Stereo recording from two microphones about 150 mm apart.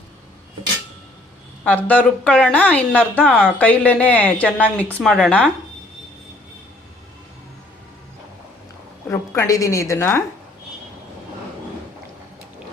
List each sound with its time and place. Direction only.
1.6 s a woman's voice: 10° left (ahead or behind)
9.0 s a woman's voice: 20° left (ahead or behind)